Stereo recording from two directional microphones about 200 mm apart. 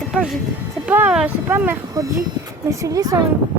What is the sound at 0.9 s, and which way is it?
Speech, 5° right (ahead or behind).